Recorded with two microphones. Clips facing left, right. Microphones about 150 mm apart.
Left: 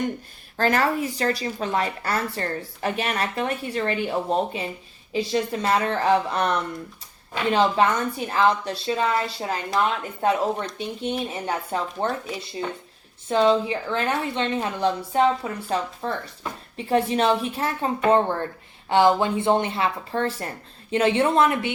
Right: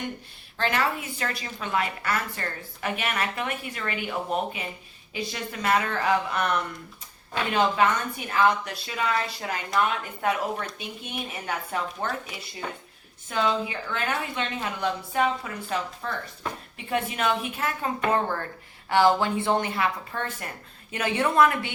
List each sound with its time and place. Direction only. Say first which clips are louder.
0.5 s a woman's voice: left 5 dB; 40° left (ahead or behind)
7.5 s a woman's voice: left 3 dB; 30° left (ahead or behind)
13.2 s a woman's voice: left 7 dB; 30° left (ahead or behind)